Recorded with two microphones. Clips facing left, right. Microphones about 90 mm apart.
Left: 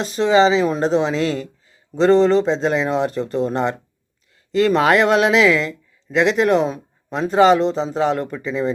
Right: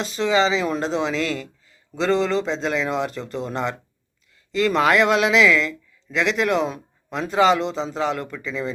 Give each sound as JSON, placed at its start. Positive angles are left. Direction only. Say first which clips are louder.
{"t": 0.0, "sound": "speech", "louder": "left 5 dB", "side_deg": 45}
{"t": 1.0, "sound": "speech", "louder": "left 4 dB", "side_deg": 20}
{"t": 2.0, "sound": "speech", "louder": "left 7 dB", "side_deg": 40}